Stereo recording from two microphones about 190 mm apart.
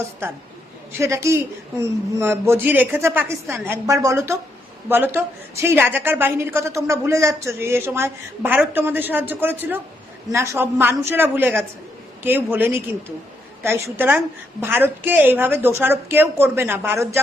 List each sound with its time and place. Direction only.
0.9 s a woman's voice: 15° right (ahead or behind)